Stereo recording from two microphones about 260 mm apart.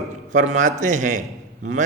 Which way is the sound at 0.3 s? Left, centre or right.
Right.